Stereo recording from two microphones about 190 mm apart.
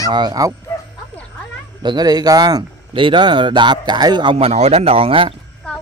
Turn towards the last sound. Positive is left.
turn(degrees=-30)  # may be behind; listen again after turning